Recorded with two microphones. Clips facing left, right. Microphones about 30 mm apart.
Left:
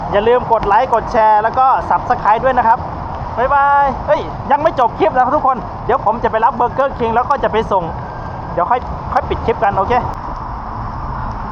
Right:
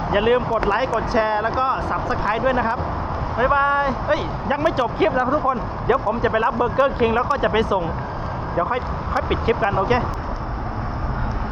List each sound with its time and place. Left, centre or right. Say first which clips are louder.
0.1 s speech: left 7 dB; centre
5.9 s speech: left 5 dB; centre
8.5 s speech: left 8 dB; centre